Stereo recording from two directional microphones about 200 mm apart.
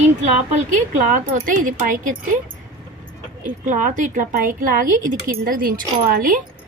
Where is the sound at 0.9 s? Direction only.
35° right (ahead or behind).